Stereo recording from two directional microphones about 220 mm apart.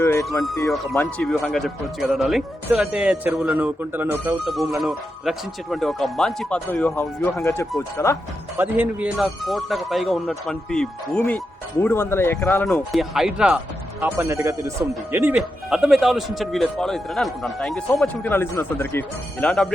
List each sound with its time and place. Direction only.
0.0 s music: 10° left (ahead or behind)
0.7 s speech: centre (ahead or behind)
8.5 s speech: 10° right (ahead or behind); by 19.6 s 5° left (ahead or behind)